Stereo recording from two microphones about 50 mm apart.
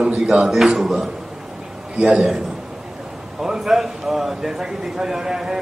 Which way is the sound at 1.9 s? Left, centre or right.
Right.